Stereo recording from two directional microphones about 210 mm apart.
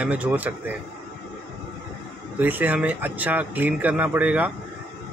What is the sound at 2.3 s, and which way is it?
Speech, 10° right (ahead or behind).